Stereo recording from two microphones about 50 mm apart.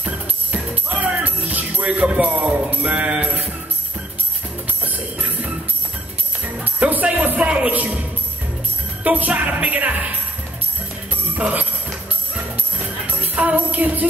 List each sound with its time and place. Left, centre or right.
0.0 s music: right
2.0 s music: right
4.8 s music: right
6.6 s jingle bell: right
7.3 s speech: right
9.0 s music: right
11.3 s music: right
13.0 s music: right